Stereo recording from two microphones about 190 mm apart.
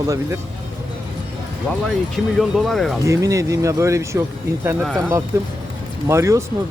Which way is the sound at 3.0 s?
15° right (ahead or behind).